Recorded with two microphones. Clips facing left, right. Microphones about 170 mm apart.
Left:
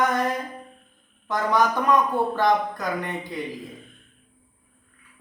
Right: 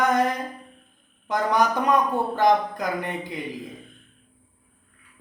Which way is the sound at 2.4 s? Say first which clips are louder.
Right 5 dB; 15° right (ahead or behind).